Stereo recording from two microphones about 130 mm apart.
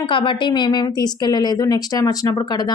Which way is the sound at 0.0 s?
40° left (ahead or behind).